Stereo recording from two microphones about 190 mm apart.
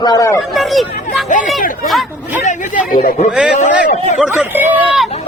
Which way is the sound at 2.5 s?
40° left (ahead or behind).